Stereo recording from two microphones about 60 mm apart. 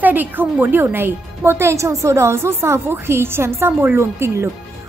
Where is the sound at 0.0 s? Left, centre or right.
Right.